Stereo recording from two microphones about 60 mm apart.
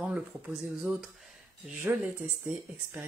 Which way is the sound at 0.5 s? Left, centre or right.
Centre.